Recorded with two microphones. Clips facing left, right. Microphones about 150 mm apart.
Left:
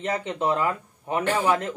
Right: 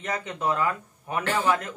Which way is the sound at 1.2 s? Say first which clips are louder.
Left 2 dB; 15° left (ahead or behind).